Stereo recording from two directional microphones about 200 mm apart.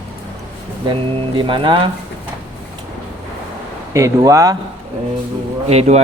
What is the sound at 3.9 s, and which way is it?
Speech, 15° right (ahead or behind).